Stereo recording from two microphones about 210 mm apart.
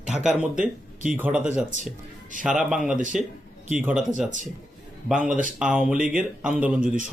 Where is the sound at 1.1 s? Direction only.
10° right (ahead or behind).